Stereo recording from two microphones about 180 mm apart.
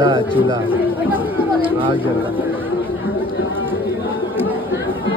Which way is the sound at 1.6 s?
30° right (ahead or behind).